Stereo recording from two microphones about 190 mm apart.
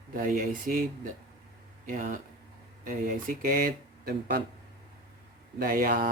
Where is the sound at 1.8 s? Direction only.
45° right (ahead or behind).